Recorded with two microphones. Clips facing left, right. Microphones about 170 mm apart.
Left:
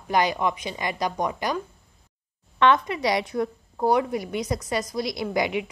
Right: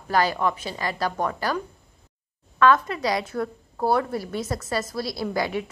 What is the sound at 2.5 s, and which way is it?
Speech, 20° left (ahead or behind).